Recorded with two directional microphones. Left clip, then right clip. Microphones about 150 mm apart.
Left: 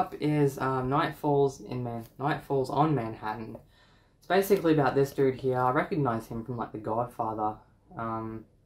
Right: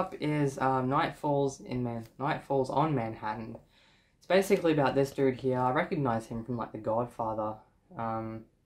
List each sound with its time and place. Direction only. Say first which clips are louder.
0.2 s speech: even; 15° right (ahead or behind)